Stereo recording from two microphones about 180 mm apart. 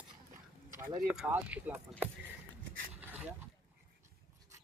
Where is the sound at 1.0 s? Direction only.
5° right (ahead or behind).